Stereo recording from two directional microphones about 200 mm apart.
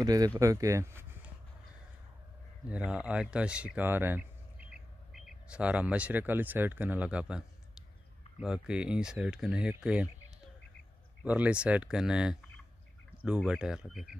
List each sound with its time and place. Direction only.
0.0 s speech: 20° right (ahead or behind)
2.7 s speech: 5° right (ahead or behind)
11.2 s speech: 5° right (ahead or behind)
13.4 s speech: centre (ahead or behind)